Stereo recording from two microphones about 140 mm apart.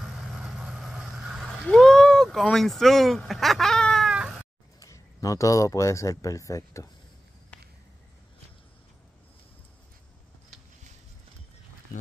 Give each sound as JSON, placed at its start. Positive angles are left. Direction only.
{"t": 0.0, "sound": "vehicle", "side_deg": 0}
{"t": 1.7, "sound": "speech", "side_deg": 5}
{"t": 4.1, "sound": "cat", "side_deg": -5}
{"t": 4.7, "sound": "speech", "side_deg": 25}